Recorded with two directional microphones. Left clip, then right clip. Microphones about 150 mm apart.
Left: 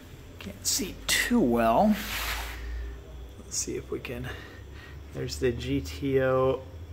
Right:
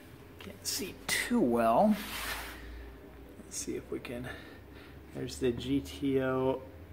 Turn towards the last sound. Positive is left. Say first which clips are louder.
# left 6 dB
turn(degrees=-10)  # may be behind; listen again after turning